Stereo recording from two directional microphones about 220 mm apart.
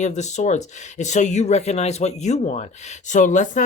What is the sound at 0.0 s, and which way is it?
Speech, 30° left (ahead or behind).